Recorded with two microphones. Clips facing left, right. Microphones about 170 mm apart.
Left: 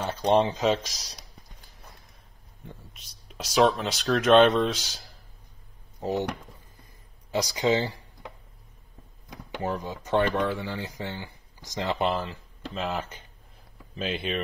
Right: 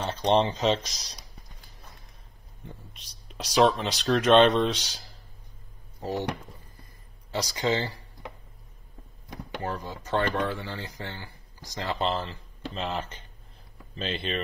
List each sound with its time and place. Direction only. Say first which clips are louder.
0.0 s speech: left 1 dB; 10° left (ahead or behind)
2.6 s speech: even; centre (ahead or behind)
5.9 s speech: left 3 dB; 15° left (ahead or behind)
7.2 s speech: left 3 dB; 15° left (ahead or behind)
9.5 s speech: left 3 dB; 15° left (ahead or behind)
12.1 s speech: left 1 dB; 5° left (ahead or behind)